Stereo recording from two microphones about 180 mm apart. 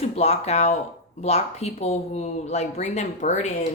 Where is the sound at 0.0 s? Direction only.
35° left (ahead or behind).